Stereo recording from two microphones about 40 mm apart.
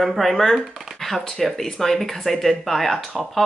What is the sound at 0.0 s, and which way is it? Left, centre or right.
Speech, centre.